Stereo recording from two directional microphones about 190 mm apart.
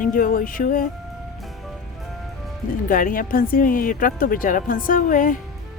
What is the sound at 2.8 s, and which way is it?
Speech, 45° left (ahead or behind).